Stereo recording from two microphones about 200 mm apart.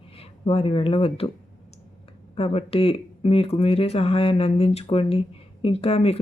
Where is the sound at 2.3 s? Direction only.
30° left (ahead or behind).